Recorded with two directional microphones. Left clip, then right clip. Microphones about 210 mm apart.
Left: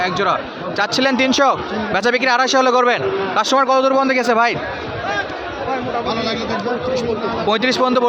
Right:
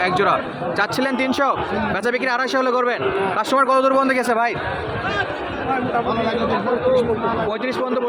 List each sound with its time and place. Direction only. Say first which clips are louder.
0.0 s a man's voice: even; 5° left (ahead or behind)
0.8 s speech: left 5 dB; 15° left (ahead or behind)
7.5 s a man's voice: left 6 dB; 30° left (ahead or behind)